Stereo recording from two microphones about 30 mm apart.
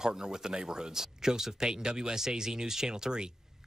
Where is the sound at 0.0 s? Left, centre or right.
Right.